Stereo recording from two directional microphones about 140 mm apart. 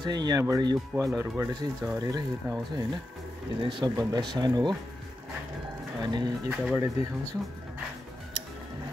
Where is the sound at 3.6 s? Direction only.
35° right (ahead or behind).